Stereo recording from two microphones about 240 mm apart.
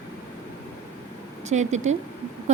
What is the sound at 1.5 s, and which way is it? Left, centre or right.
Speech, right.